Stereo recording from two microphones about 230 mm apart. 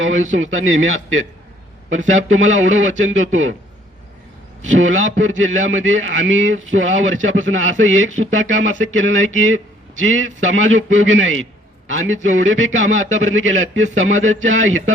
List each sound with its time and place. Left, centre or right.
0.0 s a man's voice: right
4.8 s a man's voice: right